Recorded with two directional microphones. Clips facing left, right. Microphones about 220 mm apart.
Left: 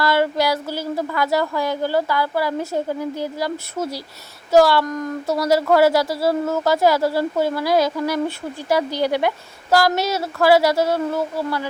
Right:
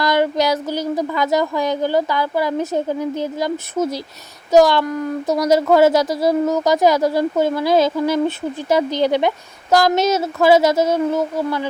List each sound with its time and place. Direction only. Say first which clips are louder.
0.0 s speech: right 2 dB; 20° right (ahead or behind)